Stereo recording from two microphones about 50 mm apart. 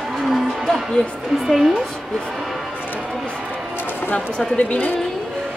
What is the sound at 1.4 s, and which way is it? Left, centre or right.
Speech, centre.